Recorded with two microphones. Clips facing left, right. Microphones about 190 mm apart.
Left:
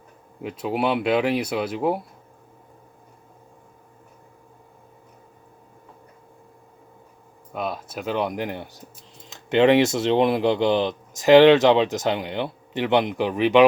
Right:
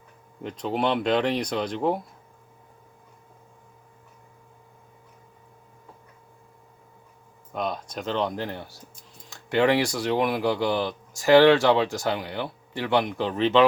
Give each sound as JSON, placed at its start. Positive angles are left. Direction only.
{"t": 0.4, "sound": "speech", "side_deg": 5}
{"t": 7.5, "sound": "speech", "side_deg": 5}